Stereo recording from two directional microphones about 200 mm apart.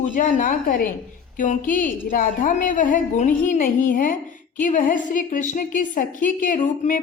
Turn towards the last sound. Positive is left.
turn(degrees=40)  # may be behind; listen again after turning